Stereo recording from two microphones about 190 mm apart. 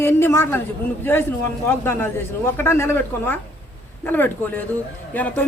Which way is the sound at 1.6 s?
10° left (ahead or behind).